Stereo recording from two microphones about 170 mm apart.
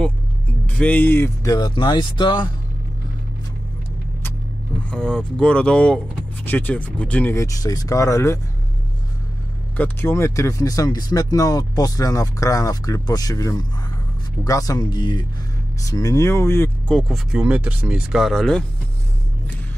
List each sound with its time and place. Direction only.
0.7 s speech: 10° left (ahead or behind); by 2.5 s 25° left (ahead or behind)
4.9 s speech: 5° left (ahead or behind)
9.8 s speech: 15° left (ahead or behind)